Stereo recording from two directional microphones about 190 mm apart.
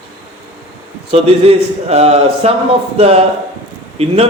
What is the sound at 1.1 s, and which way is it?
A man's voice, 30° right (ahead or behind).